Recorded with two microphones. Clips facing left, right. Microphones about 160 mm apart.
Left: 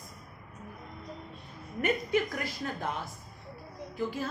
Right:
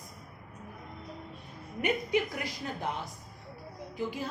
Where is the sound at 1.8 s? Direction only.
15° right (ahead or behind).